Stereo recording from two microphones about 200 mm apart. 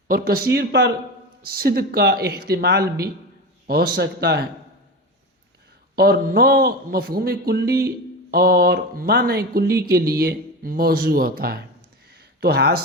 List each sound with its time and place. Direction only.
0.1 s a man's voice: 50° right (ahead or behind)
6.0 s a man's voice: 50° right (ahead or behind)
12.1 s a sound: 55° right (ahead or behind)